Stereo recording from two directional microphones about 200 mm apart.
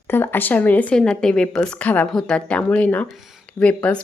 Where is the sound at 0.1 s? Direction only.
10° left (ahead or behind).